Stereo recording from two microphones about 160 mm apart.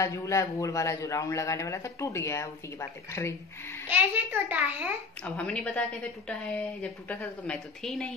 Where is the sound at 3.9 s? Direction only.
10° right (ahead or behind).